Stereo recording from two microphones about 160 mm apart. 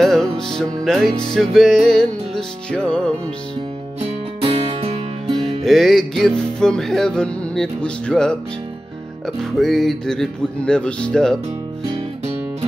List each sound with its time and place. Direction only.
0.0 s music: 5° left (ahead or behind)
4.0 s music: 40° right (ahead or behind)
5.6 s music: centre (ahead or behind)